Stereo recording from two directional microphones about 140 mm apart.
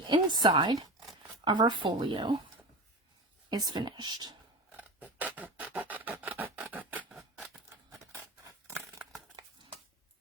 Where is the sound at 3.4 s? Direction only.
30° right (ahead or behind).